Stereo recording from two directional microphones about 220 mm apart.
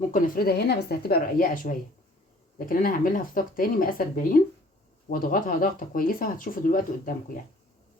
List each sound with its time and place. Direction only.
0.1 s a woman's voice: 45° left (ahead or behind)